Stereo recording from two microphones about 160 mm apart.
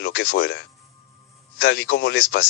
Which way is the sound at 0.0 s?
90° left.